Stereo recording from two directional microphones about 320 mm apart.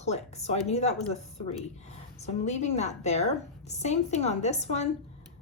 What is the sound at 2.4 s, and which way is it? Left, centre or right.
A woman's voice, left.